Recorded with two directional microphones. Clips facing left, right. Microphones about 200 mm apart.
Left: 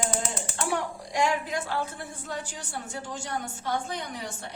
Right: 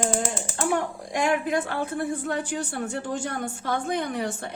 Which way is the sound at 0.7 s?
55° right (ahead or behind).